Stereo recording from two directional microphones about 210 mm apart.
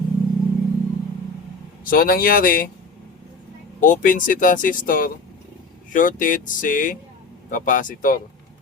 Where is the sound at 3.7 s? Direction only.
40° left (ahead or behind).